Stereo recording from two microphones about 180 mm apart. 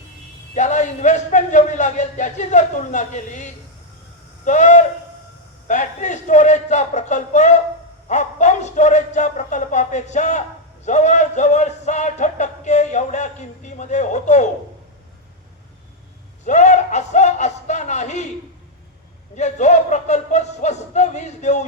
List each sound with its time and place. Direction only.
0.5 s music: 40° left (ahead or behind)
16.4 s music: 40° left (ahead or behind)
19.4 s music: 40° left (ahead or behind)